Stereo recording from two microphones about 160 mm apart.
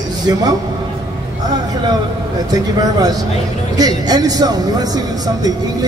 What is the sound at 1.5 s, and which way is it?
Speech, 25° right (ahead or behind).